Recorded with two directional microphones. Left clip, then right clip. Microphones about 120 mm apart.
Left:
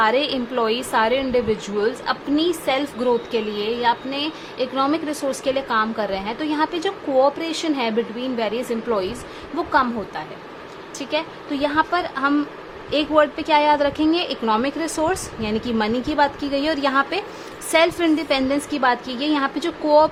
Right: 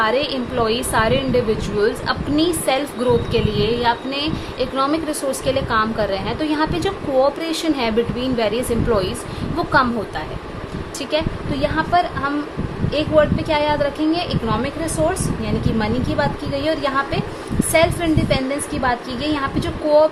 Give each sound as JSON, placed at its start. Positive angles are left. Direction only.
{"t": 0.0, "sound": "a woman's voice", "side_deg": 45}
{"t": 11.1, "sound": "a woman's voice", "side_deg": 45}